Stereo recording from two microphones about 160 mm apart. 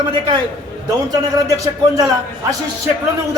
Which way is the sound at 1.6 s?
20° right (ahead or behind).